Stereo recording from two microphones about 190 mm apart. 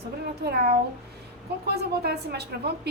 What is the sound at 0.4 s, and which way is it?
A woman's voice, 55° right (ahead or behind).